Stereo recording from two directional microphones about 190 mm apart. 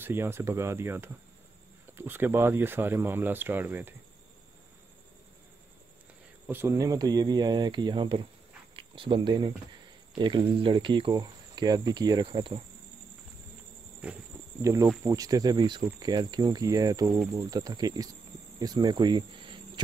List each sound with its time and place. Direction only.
0.0 s speech: 10° right (ahead or behind)
6.4 s speech: 10° right (ahead or behind); by 12.6 s 30° right (ahead or behind)
14.0 s speech: 5° right (ahead or behind)
14.6 s speech: 15° right (ahead or behind)